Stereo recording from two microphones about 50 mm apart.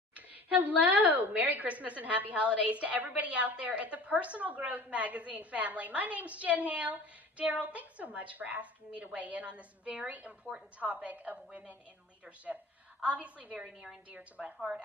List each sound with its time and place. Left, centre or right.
0.1 s a woman's voice: right
13.0 s a woman's voice: right